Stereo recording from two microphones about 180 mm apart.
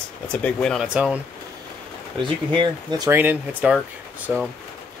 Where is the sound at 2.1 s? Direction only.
25° right (ahead or behind).